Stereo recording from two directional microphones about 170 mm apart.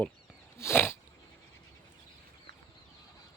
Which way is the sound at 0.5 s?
15° left (ahead or behind).